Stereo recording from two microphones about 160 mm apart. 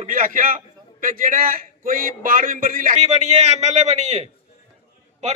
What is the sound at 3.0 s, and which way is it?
A man's voice, 40° right (ahead or behind).